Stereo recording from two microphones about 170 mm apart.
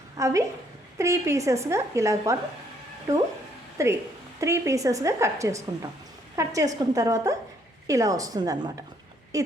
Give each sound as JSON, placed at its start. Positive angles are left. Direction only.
{"t": 0.2, "sound": "a woman's voice", "side_deg": -20}
{"t": 3.8, "sound": "a woman's voice", "side_deg": -15}